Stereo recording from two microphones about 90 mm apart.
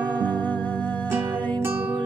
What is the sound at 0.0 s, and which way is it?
Music, 15° left (ahead or behind).